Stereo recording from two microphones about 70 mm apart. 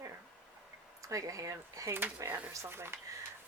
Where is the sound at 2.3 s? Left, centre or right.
Right.